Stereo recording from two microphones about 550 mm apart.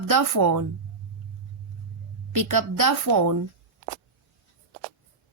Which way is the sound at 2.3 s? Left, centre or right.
Right.